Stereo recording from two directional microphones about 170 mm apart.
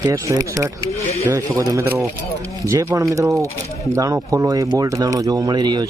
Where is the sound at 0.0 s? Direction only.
20° right (ahead or behind).